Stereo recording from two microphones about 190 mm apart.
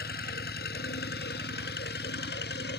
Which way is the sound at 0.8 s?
55° left (ahead or behind).